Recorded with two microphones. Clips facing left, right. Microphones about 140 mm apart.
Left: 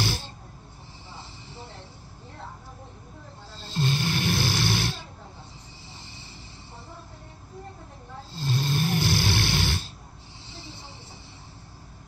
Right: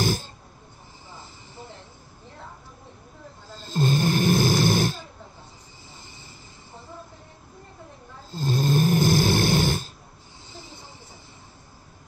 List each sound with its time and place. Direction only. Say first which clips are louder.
0.0 s a sound: right 5 dB; 45° right (ahead or behind)
3.5 s snoring: right 4 dB; 45° right (ahead or behind)
8.3 s snoring: right 5 dB; 45° right (ahead or behind)